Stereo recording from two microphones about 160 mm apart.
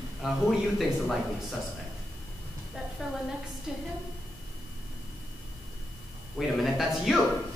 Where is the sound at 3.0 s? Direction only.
Centre (ahead or behind).